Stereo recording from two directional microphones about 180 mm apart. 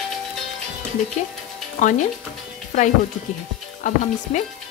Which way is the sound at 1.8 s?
45° left (ahead or behind).